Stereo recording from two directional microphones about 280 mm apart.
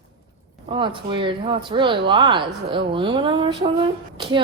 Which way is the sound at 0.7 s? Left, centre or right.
Centre.